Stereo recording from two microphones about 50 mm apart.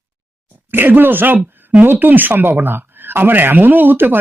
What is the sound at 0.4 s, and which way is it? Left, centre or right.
Speech, right.